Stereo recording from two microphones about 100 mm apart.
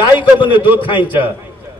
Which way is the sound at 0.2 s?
55° left (ahead or behind).